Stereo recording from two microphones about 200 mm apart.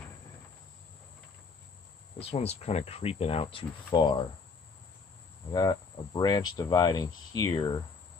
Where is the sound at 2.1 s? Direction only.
30° left (ahead or behind).